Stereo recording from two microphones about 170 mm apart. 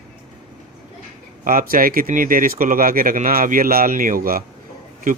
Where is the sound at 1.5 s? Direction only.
55° right (ahead or behind).